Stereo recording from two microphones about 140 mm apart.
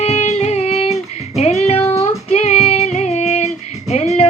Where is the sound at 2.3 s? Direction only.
50° left (ahead or behind).